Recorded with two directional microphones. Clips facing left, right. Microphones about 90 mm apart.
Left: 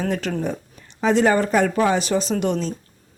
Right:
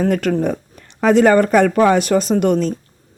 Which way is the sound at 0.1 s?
55° right (ahead or behind).